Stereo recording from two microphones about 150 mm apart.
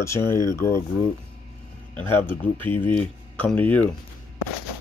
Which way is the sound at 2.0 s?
15° left (ahead or behind).